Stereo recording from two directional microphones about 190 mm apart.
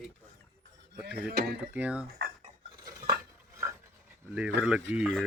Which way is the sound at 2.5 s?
40° right (ahead or behind).